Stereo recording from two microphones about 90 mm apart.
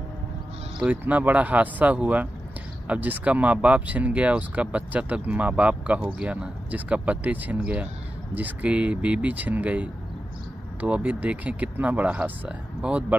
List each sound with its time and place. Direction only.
0.7 s speech: 15° right (ahead or behind)